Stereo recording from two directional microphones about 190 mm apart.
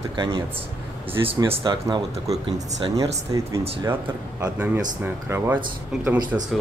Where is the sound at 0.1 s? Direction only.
25° right (ahead or behind).